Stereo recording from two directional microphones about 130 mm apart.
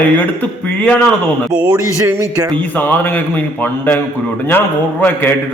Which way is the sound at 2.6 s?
15° left (ahead or behind).